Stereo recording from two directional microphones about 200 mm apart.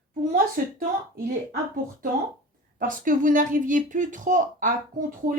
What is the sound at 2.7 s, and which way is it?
Speech, 40° right (ahead or behind).